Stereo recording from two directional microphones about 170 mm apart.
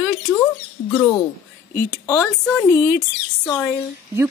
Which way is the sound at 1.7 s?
70° left (ahead or behind).